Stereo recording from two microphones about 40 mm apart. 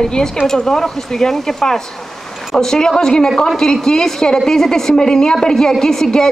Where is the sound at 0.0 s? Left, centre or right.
Centre.